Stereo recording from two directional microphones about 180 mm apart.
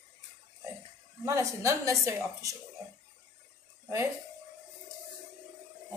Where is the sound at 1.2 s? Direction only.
15° right (ahead or behind).